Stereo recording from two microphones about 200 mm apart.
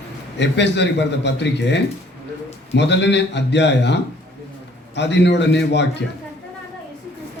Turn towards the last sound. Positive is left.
turn(degrees=60)  # may be behind; listen again after turning